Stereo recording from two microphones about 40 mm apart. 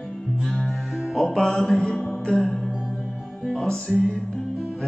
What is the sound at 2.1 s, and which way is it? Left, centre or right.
Music, left.